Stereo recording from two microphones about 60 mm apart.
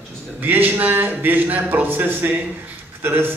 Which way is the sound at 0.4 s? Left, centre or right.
Right.